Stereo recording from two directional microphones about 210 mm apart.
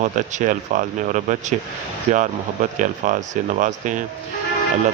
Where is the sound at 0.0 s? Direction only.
35° right (ahead or behind).